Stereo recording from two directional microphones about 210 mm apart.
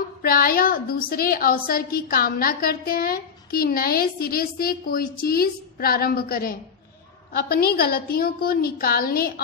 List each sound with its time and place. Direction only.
0.2 s a woman's voice: 45° left (ahead or behind)